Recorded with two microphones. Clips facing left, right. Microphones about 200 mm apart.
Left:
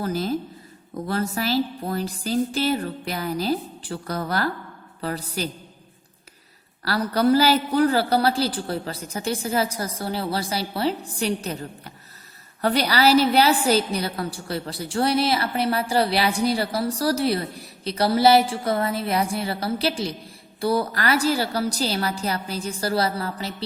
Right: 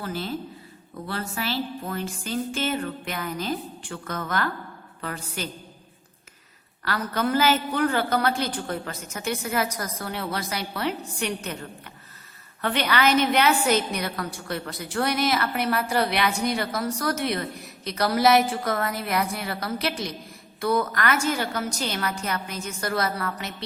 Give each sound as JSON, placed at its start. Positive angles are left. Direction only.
{"t": 0.0, "sound": "a woman's voice", "side_deg": 40}
{"t": 6.8, "sound": "a woman's voice", "side_deg": 35}
{"t": 12.6, "sound": "a woman's voice", "side_deg": 35}